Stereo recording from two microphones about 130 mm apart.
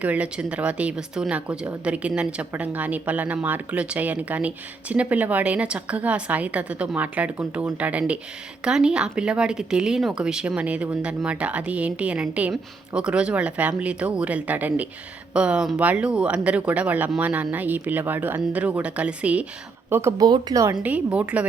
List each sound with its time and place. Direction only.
0.0 s speech: 10° right (ahead or behind); by 20.7 s 25° right (ahead or behind)
20.8 s speech: 10° right (ahead or behind)